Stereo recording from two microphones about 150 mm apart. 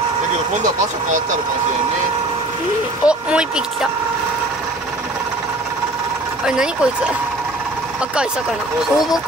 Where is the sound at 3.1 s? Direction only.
5° right (ahead or behind).